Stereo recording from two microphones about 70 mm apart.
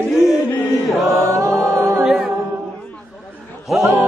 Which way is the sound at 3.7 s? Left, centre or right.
Centre.